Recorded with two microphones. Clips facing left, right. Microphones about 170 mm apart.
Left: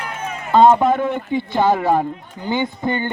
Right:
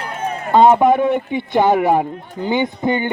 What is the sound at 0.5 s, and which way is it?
Speech, 15° right (ahead or behind).